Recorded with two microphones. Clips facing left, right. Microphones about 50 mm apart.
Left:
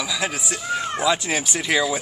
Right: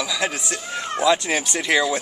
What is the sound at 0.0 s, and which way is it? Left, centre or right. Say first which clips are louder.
A man's voice: right 1 dB; centre.